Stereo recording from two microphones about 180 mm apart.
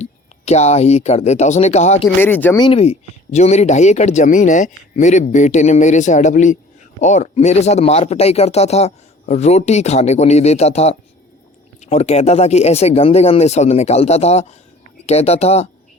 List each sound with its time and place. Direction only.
0.0 s speech: 40° left (ahead or behind)
2.1 s speech: 10° left (ahead or behind)
2.6 s speech: 30° left (ahead or behind)